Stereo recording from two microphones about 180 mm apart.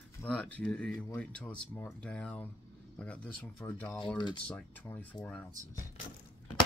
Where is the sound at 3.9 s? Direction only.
5° left (ahead or behind).